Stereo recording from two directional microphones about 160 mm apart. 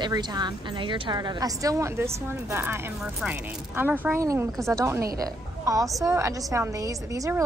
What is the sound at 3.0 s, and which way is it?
A woman's voice, 5° right (ahead or behind).